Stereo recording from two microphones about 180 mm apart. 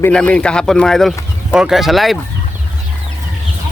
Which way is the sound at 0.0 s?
5° left (ahead or behind).